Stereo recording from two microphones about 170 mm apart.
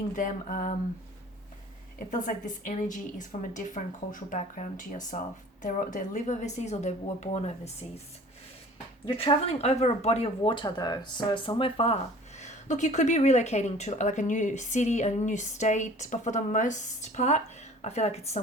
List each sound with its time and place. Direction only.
0.2 s speech: 50° left (ahead or behind)
2.0 s speech: 50° left (ahead or behind)
9.0 s speech: 35° left (ahead or behind)